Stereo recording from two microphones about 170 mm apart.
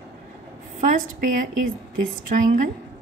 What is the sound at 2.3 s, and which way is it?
Speech, 45° right (ahead or behind).